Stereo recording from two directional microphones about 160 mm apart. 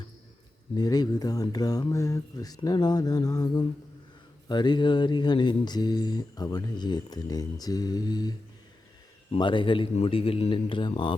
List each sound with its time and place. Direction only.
0.8 s a man's voice: 25° left (ahead or behind)